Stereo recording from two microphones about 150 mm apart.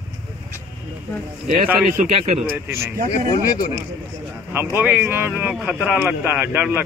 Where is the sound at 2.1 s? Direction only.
45° right (ahead or behind).